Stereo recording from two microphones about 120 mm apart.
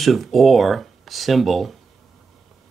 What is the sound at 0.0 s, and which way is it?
Speech, centre (ahead or behind).